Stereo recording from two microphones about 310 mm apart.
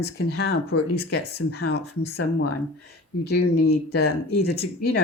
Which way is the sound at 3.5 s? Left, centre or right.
Left.